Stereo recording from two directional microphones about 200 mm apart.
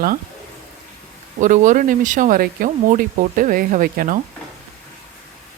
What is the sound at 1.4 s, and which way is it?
Speech, 40° right (ahead or behind).